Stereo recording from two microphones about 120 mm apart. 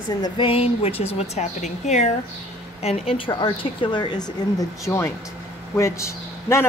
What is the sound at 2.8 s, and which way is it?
Speech, 55° left (ahead or behind).